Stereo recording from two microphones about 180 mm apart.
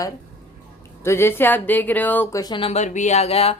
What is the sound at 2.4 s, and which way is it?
Speech, 30° left (ahead or behind).